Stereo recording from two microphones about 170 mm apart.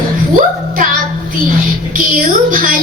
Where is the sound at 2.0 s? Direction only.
55° right (ahead or behind).